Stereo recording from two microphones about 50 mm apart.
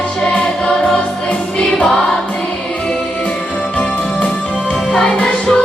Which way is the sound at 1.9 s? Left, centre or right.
Centre.